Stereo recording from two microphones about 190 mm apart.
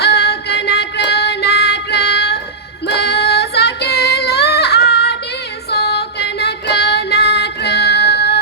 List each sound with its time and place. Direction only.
0.0 s music: 60° left (ahead or behind)
2.8 s female singing: 60° left (ahead or behind)